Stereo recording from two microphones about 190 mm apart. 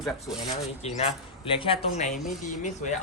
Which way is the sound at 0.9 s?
30° left (ahead or behind).